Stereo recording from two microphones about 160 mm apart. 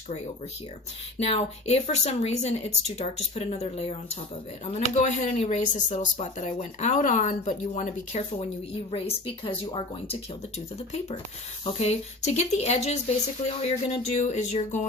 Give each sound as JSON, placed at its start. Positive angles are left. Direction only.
{"t": 1.2, "sound": "speech", "side_deg": 40}
{"t": 8.9, "sound": "speech", "side_deg": 35}